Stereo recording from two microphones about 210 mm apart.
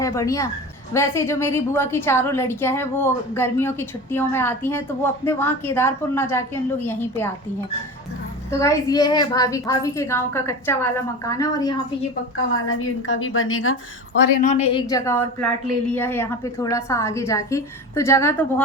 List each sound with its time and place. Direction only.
0.0 s a woman's voice: 15° left (ahead or behind)
8.4 s a woman's voice: 15° left (ahead or behind)
12.5 s a woman's voice: 80° left
14.3 s a woman's voice: 35° left (ahead or behind); by 18.6 s 10° left (ahead or behind)